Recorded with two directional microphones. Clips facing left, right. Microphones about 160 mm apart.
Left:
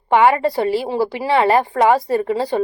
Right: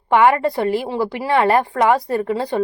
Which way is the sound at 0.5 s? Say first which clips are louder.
Left 1 dB; 35° left (ahead or behind).